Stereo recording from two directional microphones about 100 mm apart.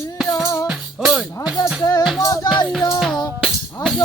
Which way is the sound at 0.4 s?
30° left (ahead or behind).